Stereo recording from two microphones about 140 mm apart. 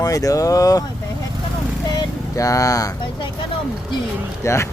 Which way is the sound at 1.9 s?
25° left (ahead or behind).